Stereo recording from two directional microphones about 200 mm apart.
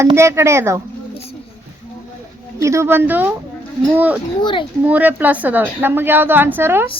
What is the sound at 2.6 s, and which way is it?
A woman's voice, 15° right (ahead or behind).